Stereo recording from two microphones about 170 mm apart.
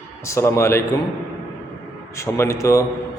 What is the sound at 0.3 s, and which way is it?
Speech, 15° left (ahead or behind).